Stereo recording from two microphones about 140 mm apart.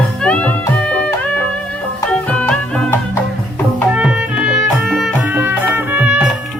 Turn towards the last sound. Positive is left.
turn(degrees=-10)  # may be behind; listen again after turning